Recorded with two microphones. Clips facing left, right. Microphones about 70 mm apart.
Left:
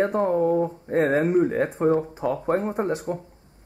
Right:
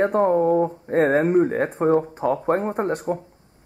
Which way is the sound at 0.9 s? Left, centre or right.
Centre.